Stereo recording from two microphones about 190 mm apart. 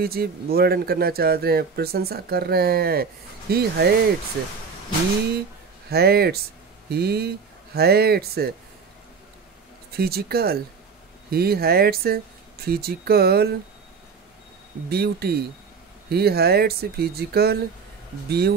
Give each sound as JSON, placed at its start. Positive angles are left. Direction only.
{"t": 0.0, "sound": "speech", "side_deg": -55}
{"t": 5.9, "sound": "speech", "side_deg": -55}
{"t": 9.9, "sound": "speech", "side_deg": -55}
{"t": 14.9, "sound": "speech", "side_deg": -55}